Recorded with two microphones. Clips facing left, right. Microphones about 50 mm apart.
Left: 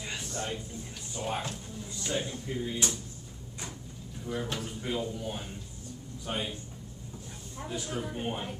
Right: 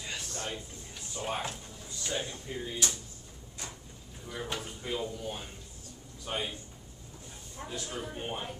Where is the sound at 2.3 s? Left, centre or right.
Left.